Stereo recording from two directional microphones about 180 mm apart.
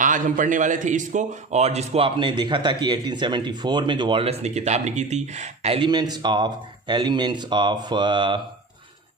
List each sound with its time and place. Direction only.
0.0 s a man's voice: 45° right (ahead or behind)
5.9 s speech: 20° right (ahead or behind)